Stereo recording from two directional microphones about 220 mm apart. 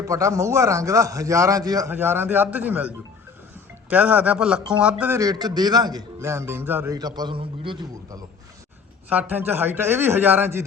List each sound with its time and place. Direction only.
0.1 s a man's voice: 15° right (ahead or behind)
9.0 s a man's voice: 10° right (ahead or behind)